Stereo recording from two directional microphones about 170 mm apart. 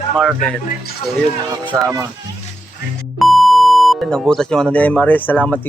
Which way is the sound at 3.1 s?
Centre (ahead or behind).